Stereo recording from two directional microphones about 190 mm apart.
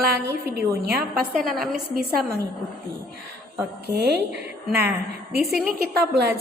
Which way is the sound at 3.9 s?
60° right (ahead or behind).